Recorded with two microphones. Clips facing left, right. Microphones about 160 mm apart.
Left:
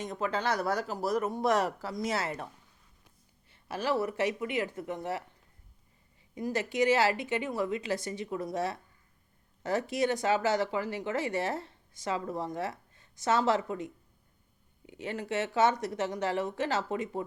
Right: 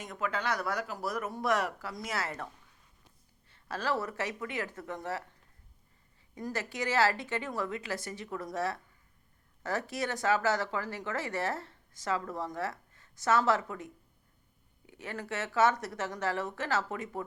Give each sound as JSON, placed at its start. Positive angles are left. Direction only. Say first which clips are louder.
{"t": 0.1, "sound": "speech", "louder": "left 1 dB", "side_deg": 30}
{"t": 3.5, "sound": "speech", "louder": "left 2 dB", "side_deg": 15}
{"t": 6.3, "sound": "speech", "louder": "left 6 dB", "side_deg": 15}